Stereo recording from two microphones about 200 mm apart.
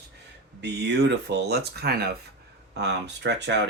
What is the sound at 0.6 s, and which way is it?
Speech, 60° right (ahead or behind).